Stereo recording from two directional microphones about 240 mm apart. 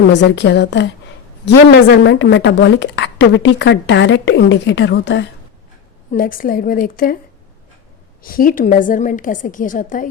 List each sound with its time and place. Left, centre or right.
0.1 s a woman's voice: left
6.1 s a woman's voice: left
8.2 s a woman's voice: left